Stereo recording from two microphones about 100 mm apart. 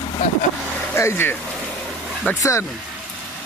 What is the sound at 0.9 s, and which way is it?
Speech, 25° left (ahead or behind).